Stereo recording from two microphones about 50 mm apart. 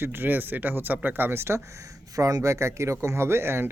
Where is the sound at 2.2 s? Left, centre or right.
Right.